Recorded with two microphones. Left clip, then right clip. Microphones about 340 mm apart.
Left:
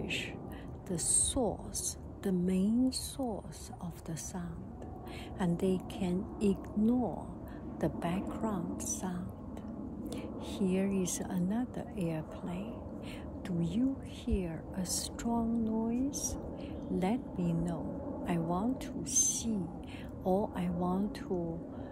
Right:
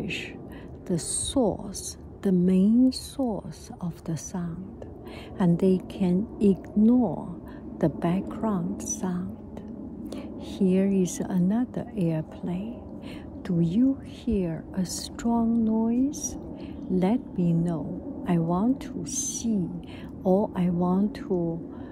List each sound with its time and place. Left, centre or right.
0.0 s a woman's voice: right
21.3 s a woman's voice: right